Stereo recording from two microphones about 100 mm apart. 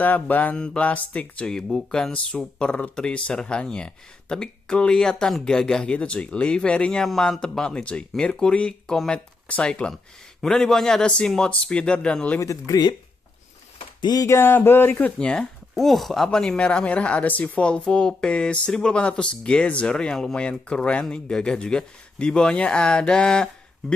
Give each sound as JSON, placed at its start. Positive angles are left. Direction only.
{"t": 0.0, "sound": "speech", "side_deg": 15}
{"t": 12.4, "sound": "speech", "side_deg": 35}
{"t": 14.2, "sound": "speech", "side_deg": 25}